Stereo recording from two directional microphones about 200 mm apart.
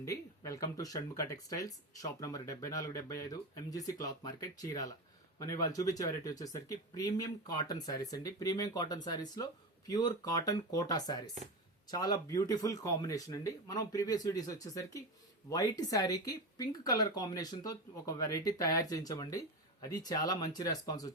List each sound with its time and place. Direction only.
0.0 s speech: 15° left (ahead or behind)